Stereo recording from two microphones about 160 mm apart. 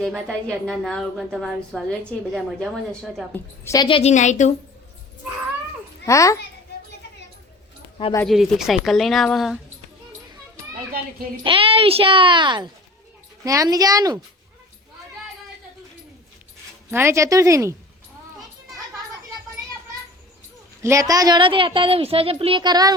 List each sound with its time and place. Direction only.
0.0 s a woman's voice: 5° left (ahead or behind)
3.3 s a woman's voice: 15° left (ahead or behind)
3.8 s a woman's voice: 35° left (ahead or behind)
4.1 s a woman's voice: 50° left (ahead or behind)
6.1 s a child's voice: 20° left (ahead or behind)
8.3 s a woman's voice: centre (ahead or behind)
11.4 s a woman's voice: 35° right (ahead or behind)
16.9 s a woman's voice: 15° right (ahead or behind)
20.8 s a woman's voice: 20° right (ahead or behind)